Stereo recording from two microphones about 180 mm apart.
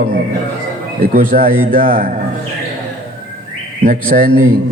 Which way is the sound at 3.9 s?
50° right (ahead or behind).